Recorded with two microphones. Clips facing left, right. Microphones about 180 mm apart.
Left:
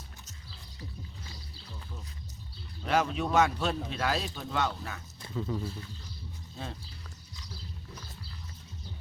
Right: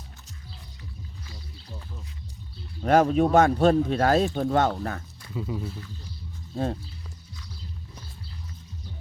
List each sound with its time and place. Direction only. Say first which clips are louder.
2.8 s speech: right 9 dB; 45° right (ahead or behind)
5.3 s speech: right 2 dB; 10° right (ahead or behind)